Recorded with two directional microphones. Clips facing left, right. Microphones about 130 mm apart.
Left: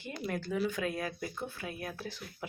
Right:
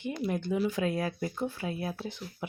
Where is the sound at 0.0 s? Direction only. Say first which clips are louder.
Right 5 dB; 20° right (ahead or behind).